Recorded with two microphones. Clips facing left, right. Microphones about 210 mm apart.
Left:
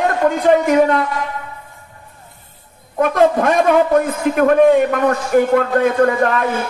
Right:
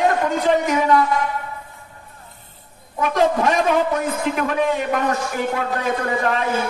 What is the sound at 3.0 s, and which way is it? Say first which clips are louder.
A man's voice: left 4 dB; 55° left (ahead or behind).